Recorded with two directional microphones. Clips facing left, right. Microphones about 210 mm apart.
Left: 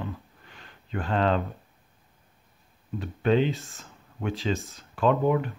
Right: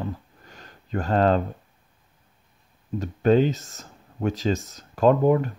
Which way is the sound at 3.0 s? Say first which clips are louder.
Right 4 dB; 40° right (ahead or behind).